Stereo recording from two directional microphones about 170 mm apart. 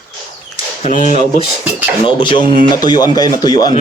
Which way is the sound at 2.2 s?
30° left (ahead or behind).